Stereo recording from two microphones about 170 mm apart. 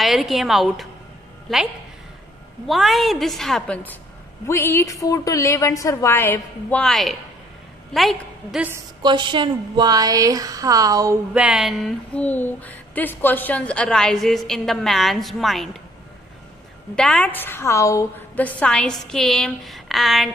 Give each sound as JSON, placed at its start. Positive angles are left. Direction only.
{"t": 0.0, "sound": "a woman's voice", "side_deg": 0}
{"t": 9.0, "sound": "a woman's voice", "side_deg": -30}
{"t": 11.3, "sound": "a woman's voice", "side_deg": -5}
{"t": 16.9, "sound": "a woman's voice", "side_deg": 5}